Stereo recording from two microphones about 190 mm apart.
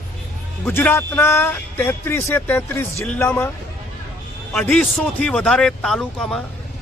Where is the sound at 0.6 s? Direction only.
10° left (ahead or behind).